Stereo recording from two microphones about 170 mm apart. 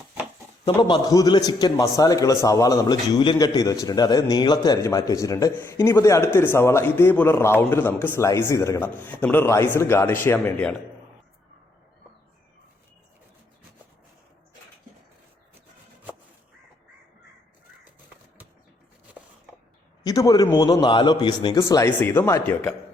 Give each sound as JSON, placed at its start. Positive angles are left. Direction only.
{"t": 0.6, "sound": "a man's voice", "side_deg": 25}
{"t": 20.1, "sound": "a man's voice", "side_deg": 20}